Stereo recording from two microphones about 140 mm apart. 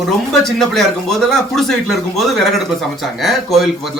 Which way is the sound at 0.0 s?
Centre (ahead or behind).